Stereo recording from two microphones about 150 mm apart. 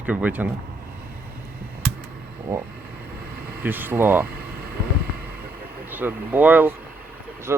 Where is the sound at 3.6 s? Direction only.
15° right (ahead or behind).